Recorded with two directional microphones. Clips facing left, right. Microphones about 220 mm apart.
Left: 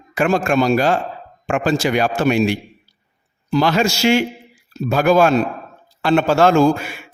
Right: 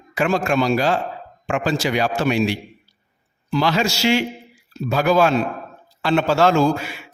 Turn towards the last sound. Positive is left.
turn(degrees=50)  # may be behind; listen again after turning